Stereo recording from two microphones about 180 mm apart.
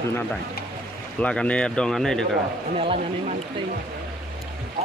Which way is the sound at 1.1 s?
5° left (ahead or behind).